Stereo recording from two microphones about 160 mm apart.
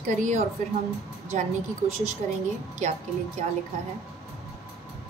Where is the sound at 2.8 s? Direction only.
45° right (ahead or behind).